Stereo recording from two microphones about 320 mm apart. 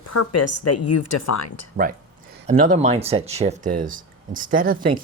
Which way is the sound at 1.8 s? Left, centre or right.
Right.